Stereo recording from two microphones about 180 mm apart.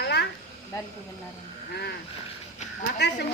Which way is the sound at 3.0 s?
65° left (ahead or behind).